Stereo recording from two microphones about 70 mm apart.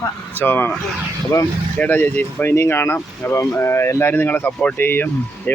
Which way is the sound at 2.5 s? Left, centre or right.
Left.